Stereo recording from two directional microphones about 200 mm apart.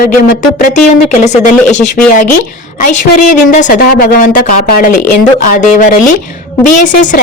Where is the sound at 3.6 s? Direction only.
45° left (ahead or behind).